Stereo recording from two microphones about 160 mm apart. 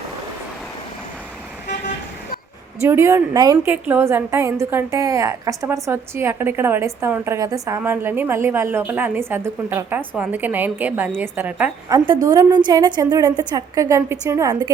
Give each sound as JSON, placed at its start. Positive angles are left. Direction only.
{"t": 2.8, "sound": "a woman's voice", "side_deg": -15}
{"t": 3.7, "sound": "a woman's voice", "side_deg": -10}
{"t": 11.9, "sound": "a woman's voice", "side_deg": -25}